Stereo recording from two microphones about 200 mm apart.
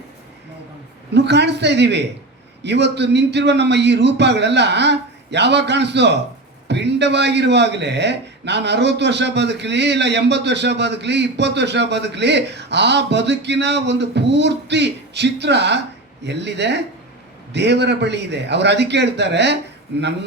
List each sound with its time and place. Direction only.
1.1 s a man's voice: 60° right (ahead or behind)